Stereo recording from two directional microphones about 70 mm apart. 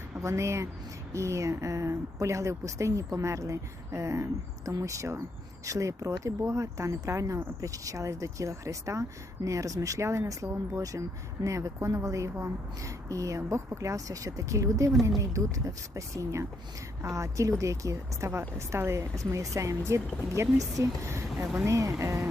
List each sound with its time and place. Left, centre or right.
0.2 s speech: right